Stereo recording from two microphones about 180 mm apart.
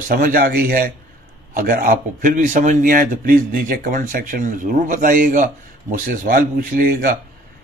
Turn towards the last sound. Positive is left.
turn(degrees=-55)  # may be behind; listen again after turning